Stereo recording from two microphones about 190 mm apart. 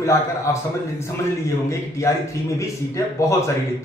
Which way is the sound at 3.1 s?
15° left (ahead or behind).